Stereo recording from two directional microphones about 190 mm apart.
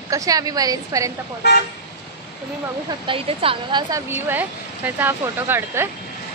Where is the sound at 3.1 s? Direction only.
30° right (ahead or behind).